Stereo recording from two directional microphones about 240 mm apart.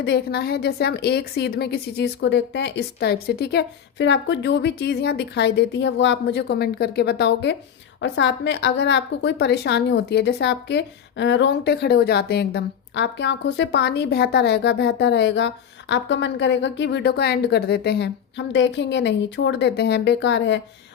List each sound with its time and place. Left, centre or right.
0.0 s a woman's voice: left